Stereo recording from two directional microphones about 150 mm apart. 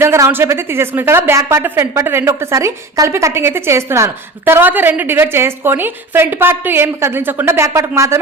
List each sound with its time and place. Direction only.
0.0 s speech: 15° right (ahead or behind)